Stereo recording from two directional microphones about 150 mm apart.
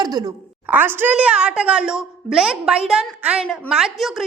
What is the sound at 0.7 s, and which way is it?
A woman's voice, 15° right (ahead or behind).